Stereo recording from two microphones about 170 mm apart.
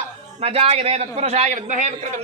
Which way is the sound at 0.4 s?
35° right (ahead or behind).